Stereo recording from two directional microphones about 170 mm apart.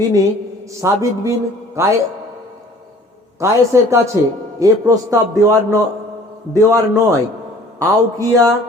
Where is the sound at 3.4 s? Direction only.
15° right (ahead or behind).